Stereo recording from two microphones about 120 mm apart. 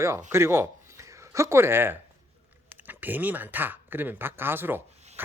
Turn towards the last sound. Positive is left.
turn(degrees=-15)  # may be behind; listen again after turning